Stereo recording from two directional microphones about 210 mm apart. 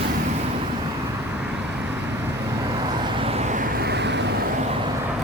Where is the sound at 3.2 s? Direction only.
30° right (ahead or behind).